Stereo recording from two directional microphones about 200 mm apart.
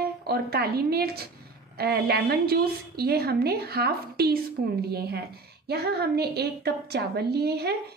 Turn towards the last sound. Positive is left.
turn(degrees=-55)  # may be behind; listen again after turning